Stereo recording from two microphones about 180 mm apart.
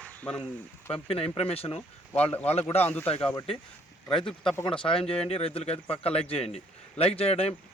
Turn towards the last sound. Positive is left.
turn(degrees=35)  # may be behind; listen again after turning